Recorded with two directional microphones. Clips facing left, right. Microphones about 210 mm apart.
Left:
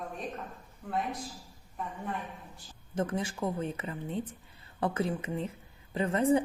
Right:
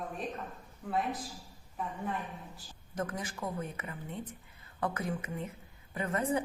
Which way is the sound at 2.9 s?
30° left (ahead or behind).